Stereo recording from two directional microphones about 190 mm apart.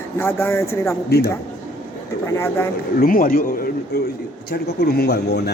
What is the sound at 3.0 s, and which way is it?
A man's voice, 45° left (ahead or behind).